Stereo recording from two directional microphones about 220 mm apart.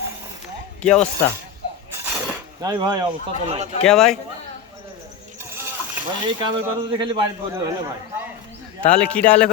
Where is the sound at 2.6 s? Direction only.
20° right (ahead or behind).